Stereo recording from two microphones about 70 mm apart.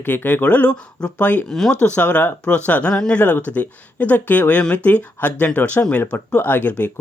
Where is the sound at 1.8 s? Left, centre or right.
Centre.